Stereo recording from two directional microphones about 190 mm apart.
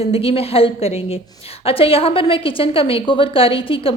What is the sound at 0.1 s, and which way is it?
A woman's voice, 30° left (ahead or behind).